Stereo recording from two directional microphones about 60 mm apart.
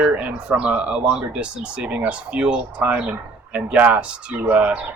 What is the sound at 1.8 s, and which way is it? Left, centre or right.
Speech, right.